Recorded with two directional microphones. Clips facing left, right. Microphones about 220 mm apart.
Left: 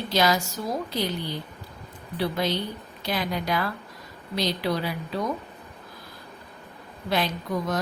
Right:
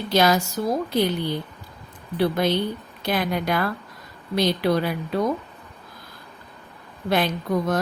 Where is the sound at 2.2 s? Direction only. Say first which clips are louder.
Right 5 dB; 55° right (ahead or behind).